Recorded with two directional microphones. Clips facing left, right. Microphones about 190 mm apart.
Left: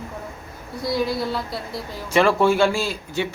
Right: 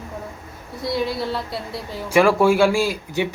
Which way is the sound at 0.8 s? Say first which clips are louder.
Even; centre (ahead or behind).